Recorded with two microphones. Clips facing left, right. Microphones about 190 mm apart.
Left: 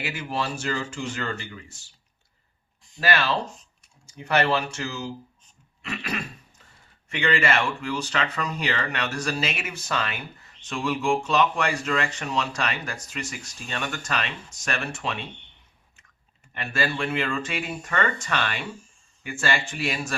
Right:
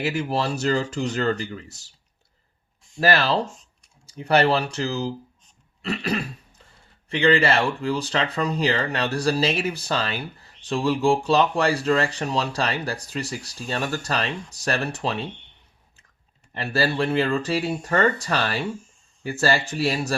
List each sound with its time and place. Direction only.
0.0 s speech: 35° right (ahead or behind)
3.0 s speech: 35° right (ahead or behind)
16.6 s speech: 35° right (ahead or behind)